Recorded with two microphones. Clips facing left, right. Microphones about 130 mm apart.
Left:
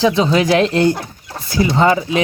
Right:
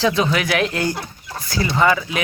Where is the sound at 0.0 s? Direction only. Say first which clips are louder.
Left 5 dB; 25° left (ahead or behind).